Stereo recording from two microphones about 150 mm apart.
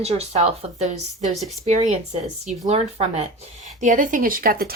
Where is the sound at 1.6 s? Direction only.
50° right (ahead or behind).